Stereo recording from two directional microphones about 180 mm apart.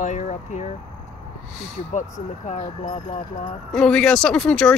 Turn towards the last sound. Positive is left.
turn(degrees=5)  # may be behind; listen again after turning